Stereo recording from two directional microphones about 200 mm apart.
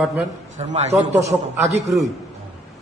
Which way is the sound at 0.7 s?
35° right (ahead or behind).